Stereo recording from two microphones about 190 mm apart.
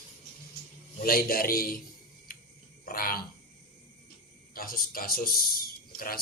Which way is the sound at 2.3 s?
50° left (ahead or behind).